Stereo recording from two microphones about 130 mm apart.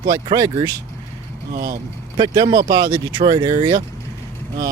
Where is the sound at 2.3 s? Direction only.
25° right (ahead or behind).